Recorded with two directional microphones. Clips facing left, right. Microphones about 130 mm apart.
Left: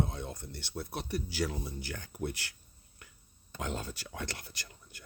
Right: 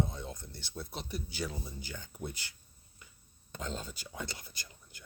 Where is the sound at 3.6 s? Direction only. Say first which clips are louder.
Left 3 dB; 80° left.